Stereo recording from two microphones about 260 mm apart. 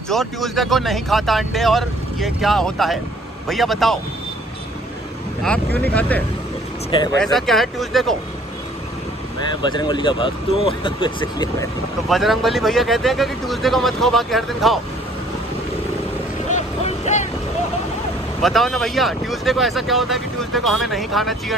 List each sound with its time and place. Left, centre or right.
0.1 s speech: centre
5.4 s speech: centre
6.9 s speech: centre
7.2 s speech: centre
9.6 s speech: centre
12.1 s speech: centre
16.4 s vehicle: left
18.4 s speech: centre